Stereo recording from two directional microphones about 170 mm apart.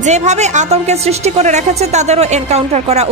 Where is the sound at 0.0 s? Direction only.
45° right (ahead or behind).